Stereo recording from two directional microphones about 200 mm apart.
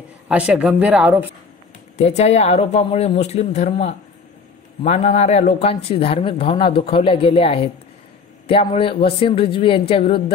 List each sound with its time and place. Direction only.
0.3 s speech: 5° right (ahead or behind)
2.0 s speech: 35° left (ahead or behind)